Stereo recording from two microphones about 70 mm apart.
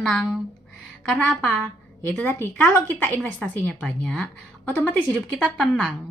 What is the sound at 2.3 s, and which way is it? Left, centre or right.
Speech, left.